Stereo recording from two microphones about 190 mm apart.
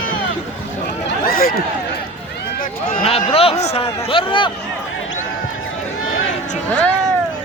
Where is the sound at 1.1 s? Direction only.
50° left (ahead or behind).